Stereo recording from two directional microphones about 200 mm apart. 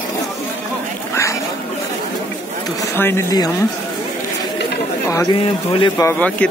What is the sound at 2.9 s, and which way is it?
Speech, 10° left (ahead or behind).